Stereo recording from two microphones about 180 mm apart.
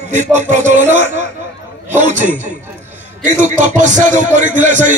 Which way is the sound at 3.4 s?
45° right (ahead or behind).